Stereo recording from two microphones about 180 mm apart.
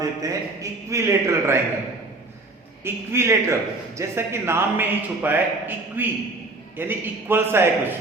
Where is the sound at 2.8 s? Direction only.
15° right (ahead or behind).